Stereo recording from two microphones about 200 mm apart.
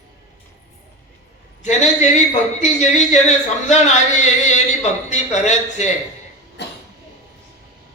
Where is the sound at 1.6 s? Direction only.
35° left (ahead or behind).